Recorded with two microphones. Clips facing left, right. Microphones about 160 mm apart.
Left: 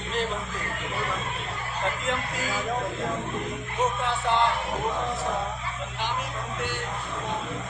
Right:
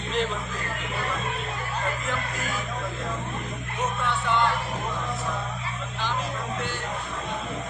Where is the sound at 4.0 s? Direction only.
30° left (ahead or behind).